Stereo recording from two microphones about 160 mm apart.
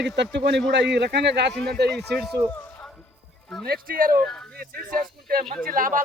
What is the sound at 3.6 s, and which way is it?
Speech, 70° right (ahead or behind).